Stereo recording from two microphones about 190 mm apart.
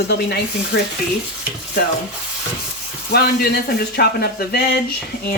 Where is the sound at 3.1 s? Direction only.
55° left (ahead or behind).